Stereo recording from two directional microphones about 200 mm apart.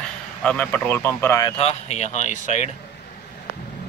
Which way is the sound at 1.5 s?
35° left (ahead or behind).